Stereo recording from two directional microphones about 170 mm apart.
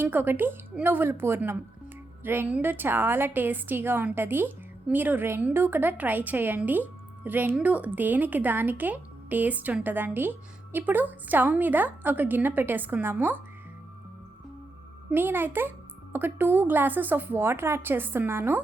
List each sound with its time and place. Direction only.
0.0 s a woman's voice: 10° right (ahead or behind)
15.1 s a woman's voice: 10° right (ahead or behind)